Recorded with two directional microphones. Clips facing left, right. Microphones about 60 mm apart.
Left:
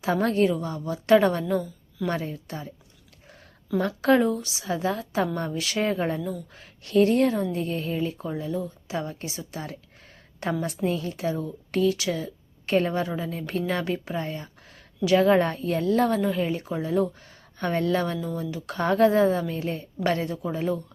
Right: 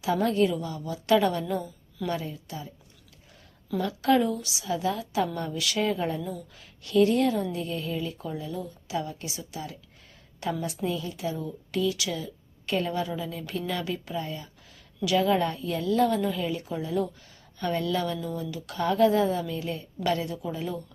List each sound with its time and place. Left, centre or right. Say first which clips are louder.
0.0 s a woman's voice: left 2 dB; left
2.0 s speech: left 3 dB; left
3.8 s a woman's voice: left 3 dB; left